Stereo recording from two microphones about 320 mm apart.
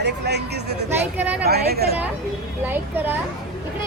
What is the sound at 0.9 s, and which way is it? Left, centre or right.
Speech, centre.